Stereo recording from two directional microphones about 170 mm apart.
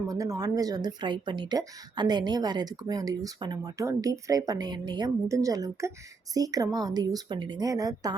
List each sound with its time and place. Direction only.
0.1 s speech: 20° right (ahead or behind)